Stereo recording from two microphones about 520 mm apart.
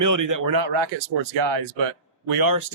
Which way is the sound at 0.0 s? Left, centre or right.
Right.